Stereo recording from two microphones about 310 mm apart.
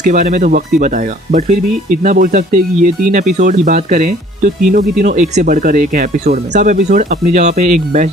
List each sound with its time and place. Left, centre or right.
0.0 s speech: right